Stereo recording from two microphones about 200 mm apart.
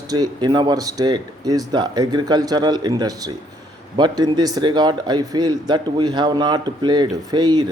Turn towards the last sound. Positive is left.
turn(degrees=-20)  # may be behind; listen again after turning